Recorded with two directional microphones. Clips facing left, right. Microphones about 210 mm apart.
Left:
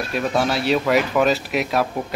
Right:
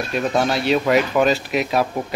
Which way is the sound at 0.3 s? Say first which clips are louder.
Right 1 dB; 5° left (ahead or behind).